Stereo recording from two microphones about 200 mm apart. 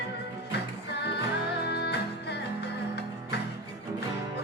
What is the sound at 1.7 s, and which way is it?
Music, 55° left (ahead or behind).